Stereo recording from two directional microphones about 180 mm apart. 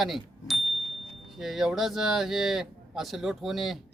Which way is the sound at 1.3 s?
Centre (ahead or behind).